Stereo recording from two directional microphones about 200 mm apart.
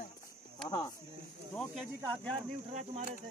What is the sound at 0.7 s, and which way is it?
Speech, 20° left (ahead or behind).